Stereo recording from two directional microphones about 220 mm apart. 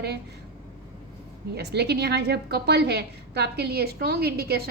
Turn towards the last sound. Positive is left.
turn(degrees=-45)  # may be behind; listen again after turning